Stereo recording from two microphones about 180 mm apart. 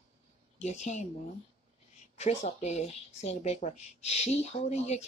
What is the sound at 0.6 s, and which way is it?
Speech, 40° left (ahead or behind).